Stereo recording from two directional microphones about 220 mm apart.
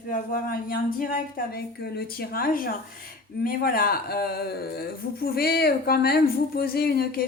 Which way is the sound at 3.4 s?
40° left (ahead or behind).